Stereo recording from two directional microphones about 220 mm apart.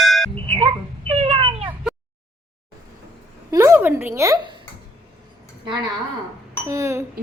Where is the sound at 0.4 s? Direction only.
25° right (ahead or behind).